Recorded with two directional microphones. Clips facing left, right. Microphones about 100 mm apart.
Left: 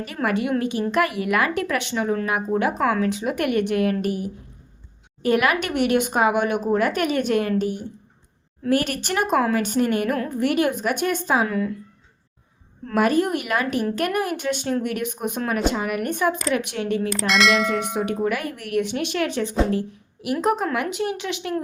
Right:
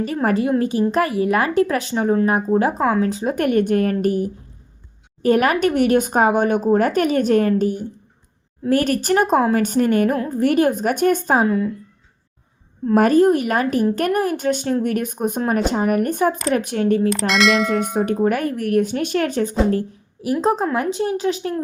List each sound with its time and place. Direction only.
0.0 s a woman's voice: 35° right (ahead or behind)
11.4 s speech: 25° right (ahead or behind)
12.9 s a woman's voice: 40° right (ahead or behind)
17.1 s a sound: centre (ahead or behind)
17.7 s a woman's voice: 40° right (ahead or behind)
20.4 s a woman's voice: 30° right (ahead or behind)